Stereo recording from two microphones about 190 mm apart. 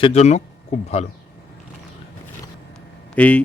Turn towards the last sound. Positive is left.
turn(degrees=5)  # may be behind; listen again after turning